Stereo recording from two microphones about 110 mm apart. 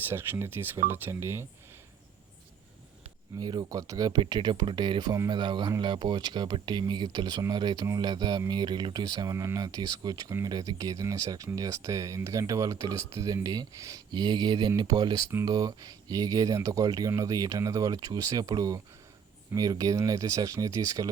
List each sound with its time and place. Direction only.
0.1 s speech: 20° right (ahead or behind)
3.4 s speech: 35° right (ahead or behind)